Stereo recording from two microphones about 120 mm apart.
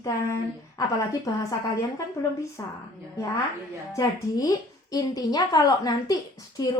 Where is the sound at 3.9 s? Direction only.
30° left (ahead or behind).